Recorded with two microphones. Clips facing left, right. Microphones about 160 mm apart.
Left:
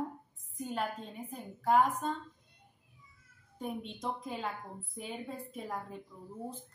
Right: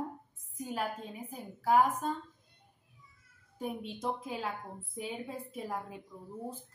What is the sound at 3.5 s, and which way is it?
A woman's voice, 5° right (ahead or behind).